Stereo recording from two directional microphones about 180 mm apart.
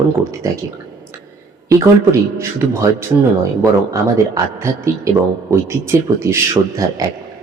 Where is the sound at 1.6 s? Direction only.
15° right (ahead or behind).